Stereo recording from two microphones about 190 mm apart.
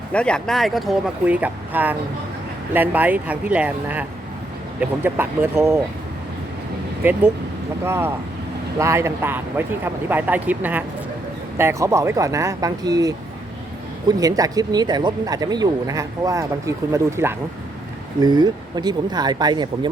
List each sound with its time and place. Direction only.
0.1 s speech: 5° left (ahead or behind); by 5.8 s 15° right (ahead or behind)
7.0 s speech: 10° right (ahead or behind)